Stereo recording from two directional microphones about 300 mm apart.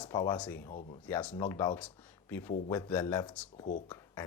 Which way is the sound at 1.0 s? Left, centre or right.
Centre.